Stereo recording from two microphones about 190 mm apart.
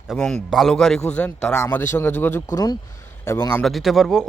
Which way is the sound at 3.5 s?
Centre (ahead or behind).